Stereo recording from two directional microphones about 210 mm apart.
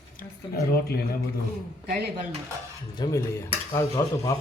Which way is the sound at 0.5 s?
45° left (ahead or behind).